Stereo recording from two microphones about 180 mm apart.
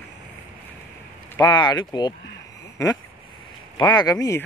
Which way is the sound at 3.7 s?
25° left (ahead or behind).